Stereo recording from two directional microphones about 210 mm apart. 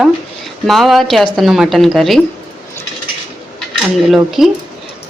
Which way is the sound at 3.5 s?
Centre (ahead or behind).